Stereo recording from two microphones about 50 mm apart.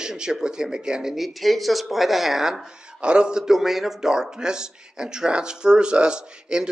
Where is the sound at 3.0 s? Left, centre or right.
Right.